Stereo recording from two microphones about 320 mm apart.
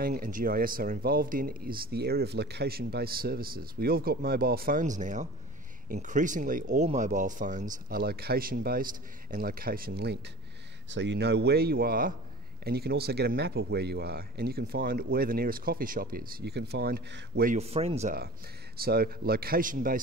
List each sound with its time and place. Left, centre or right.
0.0 s speech: right